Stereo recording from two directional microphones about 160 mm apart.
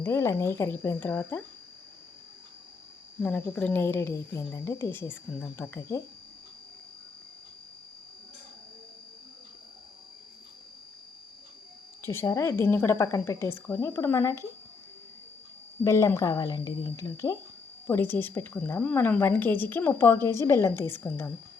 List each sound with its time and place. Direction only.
0.0 s a woman's voice: 15° left (ahead or behind)
3.2 s a woman's voice: 10° left (ahead or behind)
12.0 s a woman's voice: 15° left (ahead or behind)
15.8 s a woman's voice: 20° left (ahead or behind)